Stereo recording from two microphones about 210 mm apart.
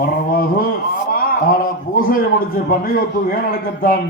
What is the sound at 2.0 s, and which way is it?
Speech, 40° left (ahead or behind).